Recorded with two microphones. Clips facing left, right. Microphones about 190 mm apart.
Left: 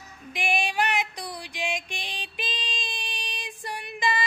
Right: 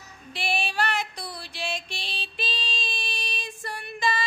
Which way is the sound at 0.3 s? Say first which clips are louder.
Left 2 dB; 15° left (ahead or behind).